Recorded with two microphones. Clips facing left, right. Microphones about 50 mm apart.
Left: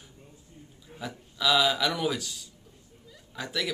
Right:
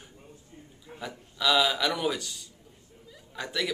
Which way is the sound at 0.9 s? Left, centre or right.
Centre.